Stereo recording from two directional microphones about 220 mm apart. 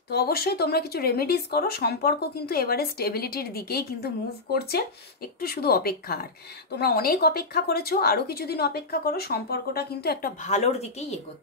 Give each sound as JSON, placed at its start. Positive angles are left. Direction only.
{"t": 0.1, "sound": "speech", "side_deg": 45}